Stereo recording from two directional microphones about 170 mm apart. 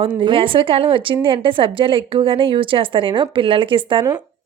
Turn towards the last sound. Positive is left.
turn(degrees=-25)  # may be behind; listen again after turning